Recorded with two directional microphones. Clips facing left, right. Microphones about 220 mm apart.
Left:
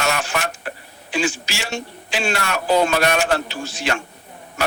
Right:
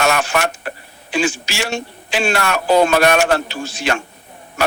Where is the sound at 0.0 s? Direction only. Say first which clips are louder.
Right 5 dB; 75° right (ahead or behind).